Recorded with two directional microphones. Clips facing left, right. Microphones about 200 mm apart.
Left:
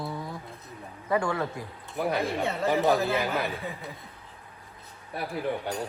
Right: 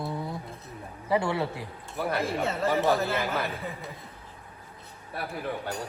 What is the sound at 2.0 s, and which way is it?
A man's voice, centre (ahead or behind).